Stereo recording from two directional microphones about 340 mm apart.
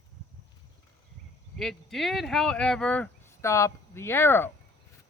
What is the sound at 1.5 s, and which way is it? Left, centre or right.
Speech, centre.